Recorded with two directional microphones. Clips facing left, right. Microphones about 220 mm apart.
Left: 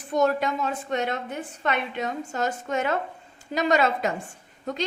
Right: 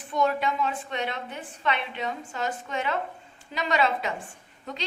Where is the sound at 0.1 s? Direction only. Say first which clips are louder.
Left 3 dB; 45° left (ahead or behind).